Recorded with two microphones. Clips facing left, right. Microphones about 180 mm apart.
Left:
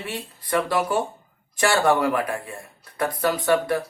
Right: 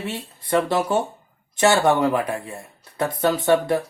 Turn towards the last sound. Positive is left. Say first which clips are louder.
# right 2 dB
turn(degrees=-25)  # may be behind; listen again after turning